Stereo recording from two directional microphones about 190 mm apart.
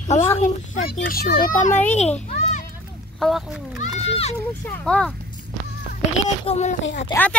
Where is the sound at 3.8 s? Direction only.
35° left (ahead or behind).